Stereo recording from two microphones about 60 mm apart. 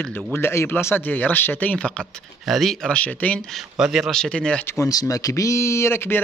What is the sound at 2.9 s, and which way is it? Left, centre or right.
Speech, left.